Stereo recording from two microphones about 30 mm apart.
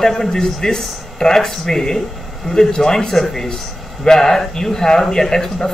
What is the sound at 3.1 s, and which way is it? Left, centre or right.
Speech, centre.